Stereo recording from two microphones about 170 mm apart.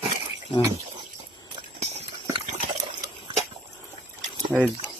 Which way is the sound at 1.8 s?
40° right (ahead or behind).